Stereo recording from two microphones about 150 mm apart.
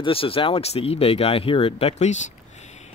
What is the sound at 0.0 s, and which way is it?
Speech, 40° left (ahead or behind).